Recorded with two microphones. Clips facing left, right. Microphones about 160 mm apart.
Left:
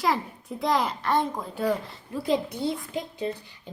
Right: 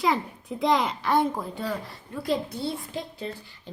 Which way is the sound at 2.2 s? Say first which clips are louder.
Left 2 dB; 15° left (ahead or behind).